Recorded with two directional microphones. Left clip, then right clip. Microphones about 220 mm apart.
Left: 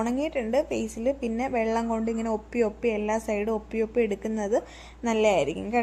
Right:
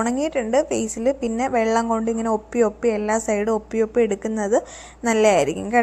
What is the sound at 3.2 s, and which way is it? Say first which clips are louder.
A woman's voice: right 6 dB; 15° right (ahead or behind).